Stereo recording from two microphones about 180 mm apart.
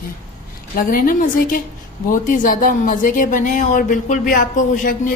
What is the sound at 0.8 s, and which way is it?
A woman's voice, 50° left (ahead or behind).